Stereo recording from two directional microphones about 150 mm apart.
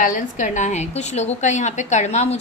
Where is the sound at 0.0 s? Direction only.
60° left (ahead or behind).